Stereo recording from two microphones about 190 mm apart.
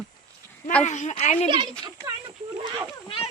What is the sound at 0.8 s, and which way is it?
Speech, 40° left (ahead or behind).